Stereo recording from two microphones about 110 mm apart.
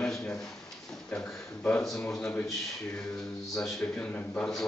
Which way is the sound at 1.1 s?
15° left (ahead or behind).